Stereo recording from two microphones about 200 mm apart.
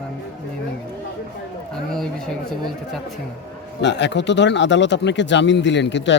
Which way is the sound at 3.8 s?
60° left (ahead or behind).